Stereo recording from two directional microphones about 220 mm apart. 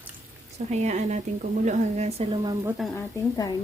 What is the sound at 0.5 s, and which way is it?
Speech, 30° right (ahead or behind).